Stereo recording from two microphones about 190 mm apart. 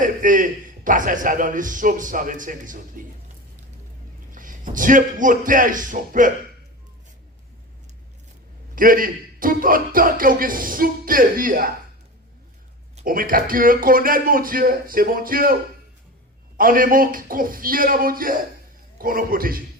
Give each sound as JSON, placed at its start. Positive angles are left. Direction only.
{"t": 0.0, "sound": "a man's voice", "side_deg": -45}
{"t": 4.3, "sound": "a man's voice", "side_deg": -45}
{"t": 8.7, "sound": "a man's voice", "side_deg": -45}
{"t": 13.0, "sound": "a man's voice", "side_deg": -45}
{"t": 16.6, "sound": "a man's voice", "side_deg": -45}